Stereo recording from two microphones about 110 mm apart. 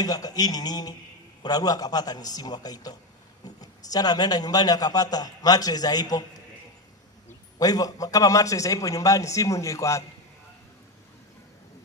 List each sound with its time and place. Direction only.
0.0 s a man's voice: 35° left (ahead or behind)
7.5 s a man's voice: 35° left (ahead or behind)